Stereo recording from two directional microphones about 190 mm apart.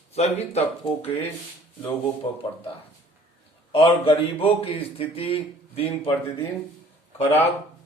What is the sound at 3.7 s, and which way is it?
A man's voice, 30° left (ahead or behind).